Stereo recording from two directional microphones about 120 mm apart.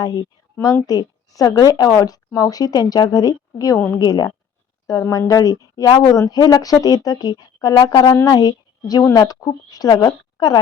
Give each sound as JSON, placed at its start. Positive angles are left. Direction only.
{"t": 0.0, "sound": "speech", "side_deg": 30}